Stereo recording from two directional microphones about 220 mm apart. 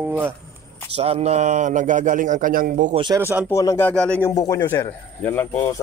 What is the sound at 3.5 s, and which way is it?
A man's voice, 10° left (ahead or behind).